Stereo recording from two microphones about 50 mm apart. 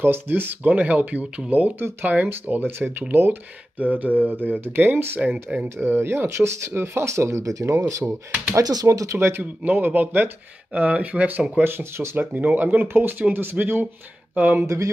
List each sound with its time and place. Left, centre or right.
0.0 s speech: right
0.7 s speech: right
1.8 s speech: right
2.4 s speech: right
5.2 s speech: right
5.8 s speech: right
8.0 s speech: right
8.5 s speech: right
9.8 s speech: right
11.6 s speech: right
12.4 s speech: right
12.8 s speech: right